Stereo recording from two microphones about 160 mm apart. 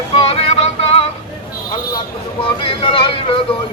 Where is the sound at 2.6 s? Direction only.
35° left (ahead or behind).